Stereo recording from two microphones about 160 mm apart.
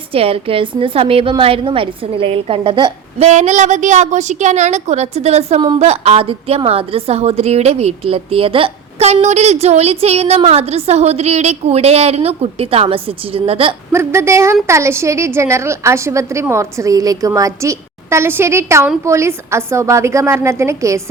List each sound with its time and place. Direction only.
0.1 s a woman's voice: 35° right (ahead or behind)
3.2 s a woman's voice: 45° right (ahead or behind)
13.9 s a woman's voice: 15° right (ahead or behind)